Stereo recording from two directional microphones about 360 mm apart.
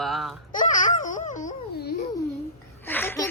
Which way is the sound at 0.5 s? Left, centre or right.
Left.